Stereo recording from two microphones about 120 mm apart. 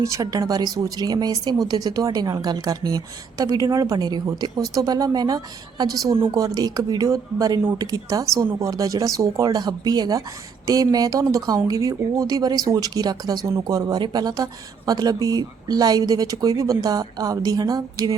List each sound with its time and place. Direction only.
0.0 s speech: 30° right (ahead or behind)